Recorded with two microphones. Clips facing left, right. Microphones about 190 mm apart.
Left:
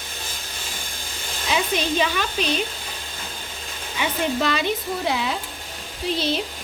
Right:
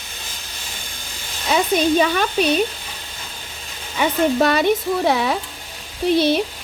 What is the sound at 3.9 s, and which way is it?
Speech, 50° right (ahead or behind).